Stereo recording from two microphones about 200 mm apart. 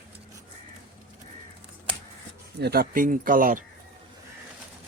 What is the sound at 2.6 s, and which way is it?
Speech, 50° right (ahead or behind).